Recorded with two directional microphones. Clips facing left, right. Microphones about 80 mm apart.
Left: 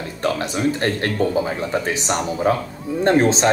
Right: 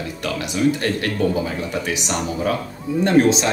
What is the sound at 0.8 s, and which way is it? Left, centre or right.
Speech, left.